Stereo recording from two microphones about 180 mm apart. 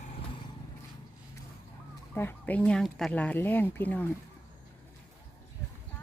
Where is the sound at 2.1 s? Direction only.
10° left (ahead or behind).